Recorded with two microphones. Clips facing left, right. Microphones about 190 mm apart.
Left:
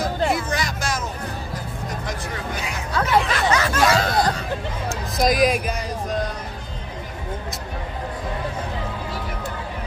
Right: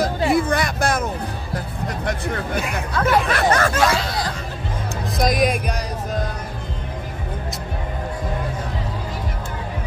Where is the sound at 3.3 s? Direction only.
55° right (ahead or behind).